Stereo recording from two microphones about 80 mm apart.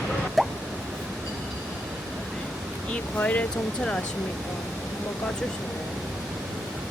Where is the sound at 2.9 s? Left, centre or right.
Centre.